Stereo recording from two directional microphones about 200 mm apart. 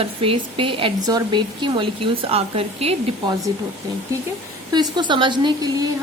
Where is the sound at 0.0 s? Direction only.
30° right (ahead or behind).